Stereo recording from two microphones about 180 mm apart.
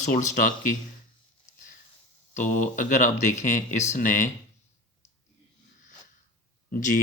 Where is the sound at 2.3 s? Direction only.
45° left (ahead or behind).